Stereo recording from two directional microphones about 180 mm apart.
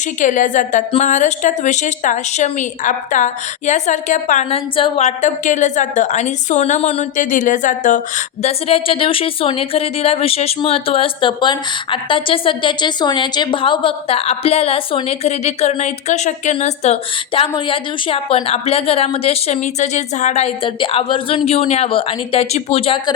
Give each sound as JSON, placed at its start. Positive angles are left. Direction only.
{"t": 0.2, "sound": "a woman's voice", "side_deg": 45}